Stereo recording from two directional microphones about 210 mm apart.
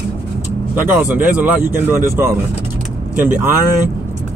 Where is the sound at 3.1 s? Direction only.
10° right (ahead or behind).